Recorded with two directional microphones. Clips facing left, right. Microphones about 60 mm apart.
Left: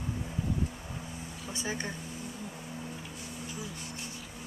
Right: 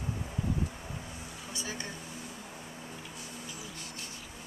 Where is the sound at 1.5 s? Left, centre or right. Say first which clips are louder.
Left 4 dB; left.